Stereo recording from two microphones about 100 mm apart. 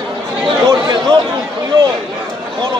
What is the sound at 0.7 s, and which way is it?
Speech, 45° right (ahead or behind).